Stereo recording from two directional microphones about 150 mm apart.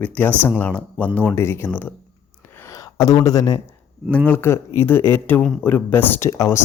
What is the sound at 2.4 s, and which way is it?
Gasp, 15° left (ahead or behind).